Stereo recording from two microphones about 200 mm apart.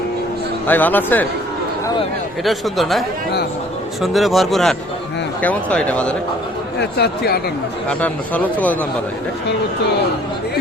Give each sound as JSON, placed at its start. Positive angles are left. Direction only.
{"t": 0.7, "sound": "speech", "side_deg": 10}
{"t": 2.4, "sound": "a man's voice", "side_deg": 0}
{"t": 4.0, "sound": "a man's voice", "side_deg": 0}
{"t": 6.7, "sound": "speech", "side_deg": 55}
{"t": 7.9, "sound": "speech", "side_deg": 5}